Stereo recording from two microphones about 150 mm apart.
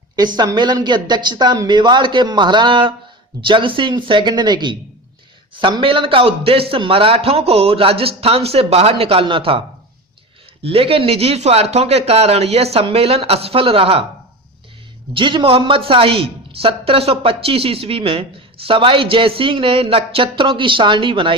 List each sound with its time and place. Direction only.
0.3 s speech: 30° right (ahead or behind)
15.1 s speech: 35° right (ahead or behind)